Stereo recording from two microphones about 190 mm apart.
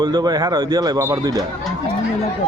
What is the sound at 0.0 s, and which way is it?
A man's voice, 20° right (ahead or behind).